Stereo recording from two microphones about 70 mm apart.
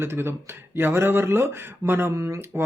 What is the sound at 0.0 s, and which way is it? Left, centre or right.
Speech, right.